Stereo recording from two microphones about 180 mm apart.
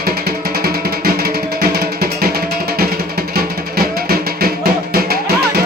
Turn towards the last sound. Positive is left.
turn(degrees=-60)  # may be behind; listen again after turning